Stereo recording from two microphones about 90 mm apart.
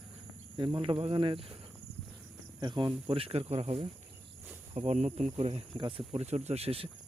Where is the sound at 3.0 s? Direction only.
90° right.